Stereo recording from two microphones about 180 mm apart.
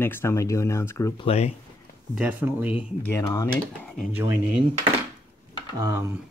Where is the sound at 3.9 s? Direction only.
10° right (ahead or behind).